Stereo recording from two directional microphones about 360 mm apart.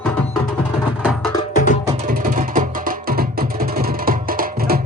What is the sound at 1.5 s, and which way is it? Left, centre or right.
Music, left.